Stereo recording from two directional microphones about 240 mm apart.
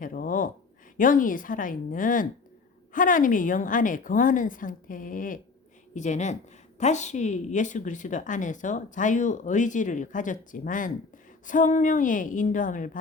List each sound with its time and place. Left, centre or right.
0.0 s a woman's voice: left